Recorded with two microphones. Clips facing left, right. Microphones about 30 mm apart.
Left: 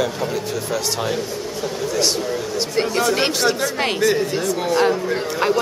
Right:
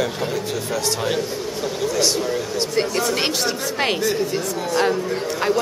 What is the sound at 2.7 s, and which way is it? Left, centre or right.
Speech, centre.